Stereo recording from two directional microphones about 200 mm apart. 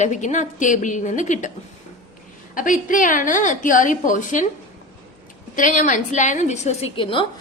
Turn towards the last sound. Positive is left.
turn(degrees=25)  # may be behind; listen again after turning